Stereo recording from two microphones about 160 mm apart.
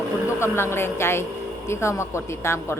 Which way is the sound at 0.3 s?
15° left (ahead or behind).